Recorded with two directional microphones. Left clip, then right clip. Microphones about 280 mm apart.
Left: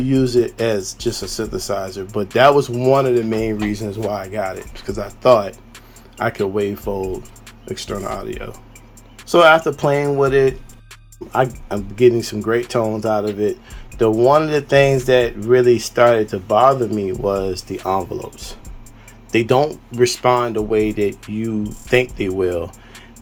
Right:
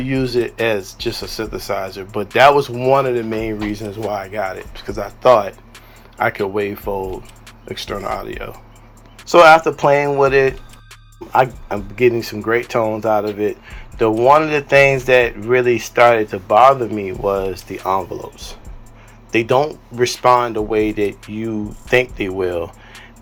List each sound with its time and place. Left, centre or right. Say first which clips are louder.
0.0 s speech: left 2 dB; centre
21.6 s speech: right 1 dB; centre
22.2 s speech: even; centre